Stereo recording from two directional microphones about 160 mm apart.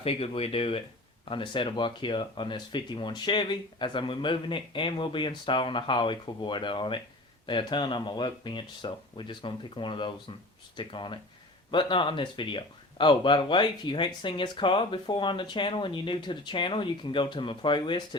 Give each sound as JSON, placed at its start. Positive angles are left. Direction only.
{"t": 0.0, "sound": "speech", "side_deg": 35}